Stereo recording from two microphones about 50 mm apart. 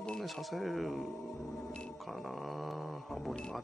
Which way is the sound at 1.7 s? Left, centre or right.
Left.